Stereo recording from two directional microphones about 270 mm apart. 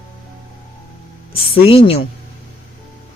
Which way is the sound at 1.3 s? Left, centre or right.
Left.